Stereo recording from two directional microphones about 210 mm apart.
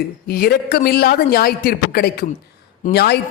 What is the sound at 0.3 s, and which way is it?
Speech, 45° left (ahead or behind).